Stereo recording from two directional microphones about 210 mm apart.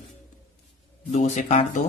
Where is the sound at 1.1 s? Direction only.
35° left (ahead or behind).